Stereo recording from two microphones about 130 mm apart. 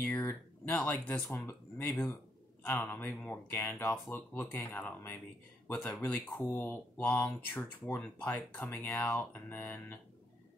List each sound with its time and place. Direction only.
0.0 s speech: 15° left (ahead or behind)